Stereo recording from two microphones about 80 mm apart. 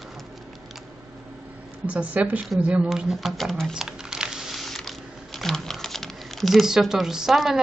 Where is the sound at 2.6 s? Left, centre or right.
Centre.